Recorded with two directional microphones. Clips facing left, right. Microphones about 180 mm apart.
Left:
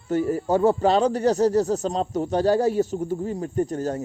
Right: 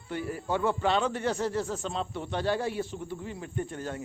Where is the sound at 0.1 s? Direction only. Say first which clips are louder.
Left 10 dB; 40° left (ahead or behind).